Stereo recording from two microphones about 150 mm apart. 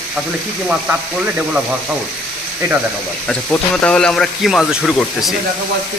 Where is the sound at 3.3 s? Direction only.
5° left (ahead or behind).